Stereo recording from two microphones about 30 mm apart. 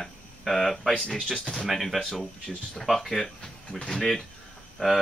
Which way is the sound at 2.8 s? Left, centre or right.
Centre.